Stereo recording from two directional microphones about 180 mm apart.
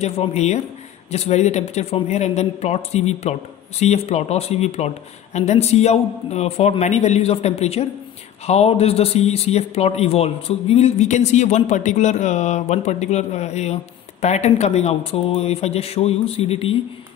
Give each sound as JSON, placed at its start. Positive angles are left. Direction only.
{"t": 0.0, "sound": "a man's voice", "side_deg": 40}